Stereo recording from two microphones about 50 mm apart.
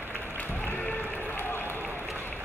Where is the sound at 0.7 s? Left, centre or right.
Left.